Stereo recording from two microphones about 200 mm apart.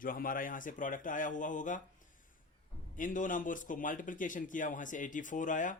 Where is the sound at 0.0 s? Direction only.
45° left (ahead or behind).